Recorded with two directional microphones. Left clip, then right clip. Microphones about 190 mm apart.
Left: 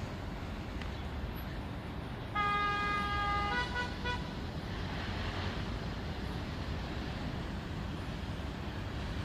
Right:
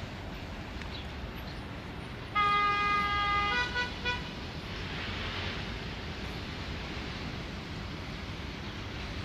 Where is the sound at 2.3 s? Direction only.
35° left (ahead or behind).